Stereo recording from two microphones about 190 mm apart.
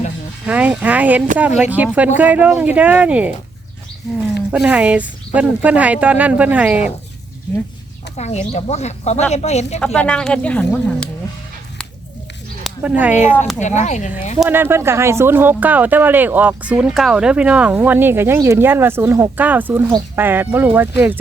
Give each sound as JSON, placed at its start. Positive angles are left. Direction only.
{"t": 0.4, "sound": "speech", "side_deg": -5}
{"t": 4.5, "sound": "speech", "side_deg": -5}
{"t": 8.1, "sound": "speech", "side_deg": 35}
{"t": 9.8, "sound": "speech", "side_deg": 5}
{"t": 12.6, "sound": "a sound", "side_deg": -5}
{"t": 13.6, "sound": "speech", "side_deg": 40}
{"t": 14.3, "sound": "speech", "side_deg": -5}